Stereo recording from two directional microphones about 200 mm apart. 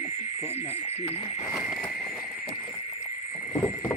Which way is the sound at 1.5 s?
Centre (ahead or behind).